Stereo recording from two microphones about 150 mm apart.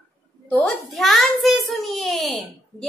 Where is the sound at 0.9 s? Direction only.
Centre (ahead or behind).